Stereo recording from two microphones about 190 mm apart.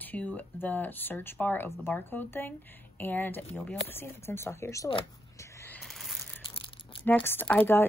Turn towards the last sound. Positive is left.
turn(degrees=10)  # may be behind; listen again after turning